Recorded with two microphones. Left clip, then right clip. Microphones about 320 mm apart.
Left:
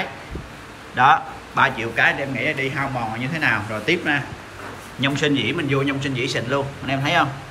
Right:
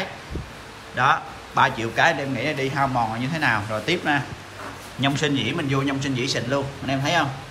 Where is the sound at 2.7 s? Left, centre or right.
Centre.